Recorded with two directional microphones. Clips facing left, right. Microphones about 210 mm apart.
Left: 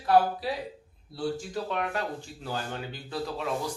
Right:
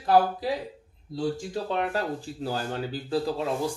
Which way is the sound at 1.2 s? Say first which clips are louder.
Right 2 dB; 30° right (ahead or behind).